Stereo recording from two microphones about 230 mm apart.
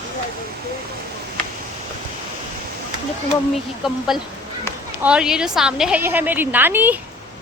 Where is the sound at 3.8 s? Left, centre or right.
Centre.